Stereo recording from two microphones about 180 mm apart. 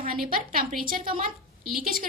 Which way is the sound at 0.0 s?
55° right (ahead or behind).